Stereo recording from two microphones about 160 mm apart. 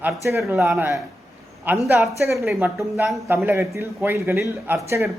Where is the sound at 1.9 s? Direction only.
15° right (ahead or behind).